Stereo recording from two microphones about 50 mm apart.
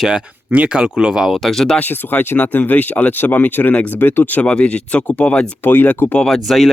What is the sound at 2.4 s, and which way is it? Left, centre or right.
Speech, left.